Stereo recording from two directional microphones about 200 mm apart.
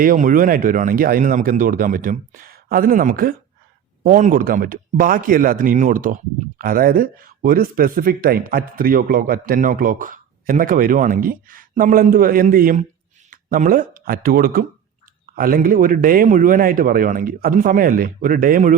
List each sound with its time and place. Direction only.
0.0 s speech: 40° right (ahead or behind)